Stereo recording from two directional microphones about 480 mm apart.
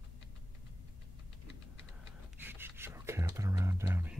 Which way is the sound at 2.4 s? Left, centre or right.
Centre.